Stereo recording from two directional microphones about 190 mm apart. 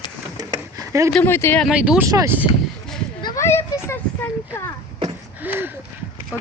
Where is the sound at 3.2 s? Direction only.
20° left (ahead or behind).